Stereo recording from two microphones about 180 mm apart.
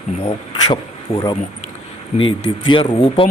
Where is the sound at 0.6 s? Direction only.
25° left (ahead or behind).